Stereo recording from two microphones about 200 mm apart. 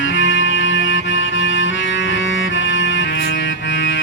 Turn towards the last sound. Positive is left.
turn(degrees=65)  # may be behind; listen again after turning